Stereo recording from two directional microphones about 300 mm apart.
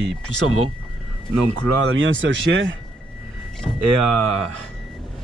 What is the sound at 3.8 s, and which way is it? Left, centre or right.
Speech, right.